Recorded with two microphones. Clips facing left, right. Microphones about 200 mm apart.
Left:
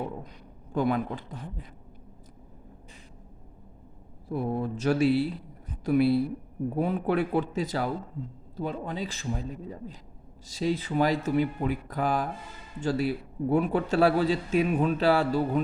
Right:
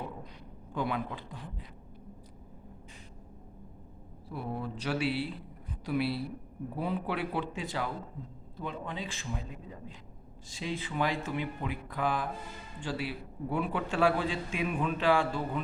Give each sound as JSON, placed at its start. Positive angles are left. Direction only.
{"t": 0.7, "sound": "a man's voice", "side_deg": 45}
{"t": 4.3, "sound": "a man's voice", "side_deg": 45}